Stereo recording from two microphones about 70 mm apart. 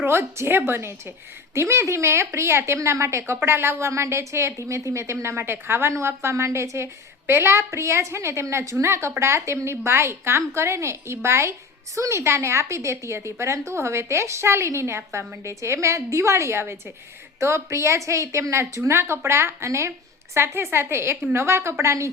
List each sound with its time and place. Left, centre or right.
0.0 s a woman's voice: right